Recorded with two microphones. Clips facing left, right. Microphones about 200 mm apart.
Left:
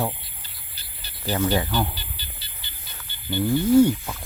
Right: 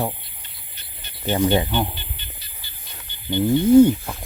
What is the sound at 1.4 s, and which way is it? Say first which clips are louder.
Speech: right 3 dB; 20° right (ahead or behind).